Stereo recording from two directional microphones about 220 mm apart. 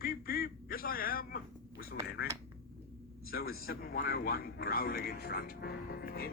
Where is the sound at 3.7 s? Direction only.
45° left (ahead or behind).